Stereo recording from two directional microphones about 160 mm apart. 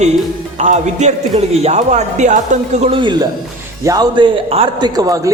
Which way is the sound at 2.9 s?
30° right (ahead or behind).